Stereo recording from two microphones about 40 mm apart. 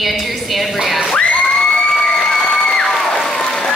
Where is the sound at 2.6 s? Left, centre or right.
Centre.